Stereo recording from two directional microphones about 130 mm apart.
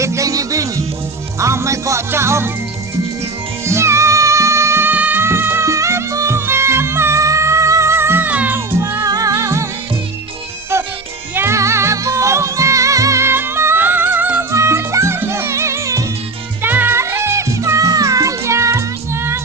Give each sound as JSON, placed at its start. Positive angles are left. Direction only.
{"t": 0.0, "sound": "music", "side_deg": -25}
{"t": 3.6, "sound": "music", "side_deg": -20}
{"t": 11.3, "sound": "music", "side_deg": -20}